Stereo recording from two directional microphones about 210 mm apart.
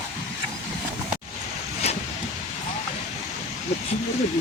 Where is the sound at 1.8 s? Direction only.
30° left (ahead or behind).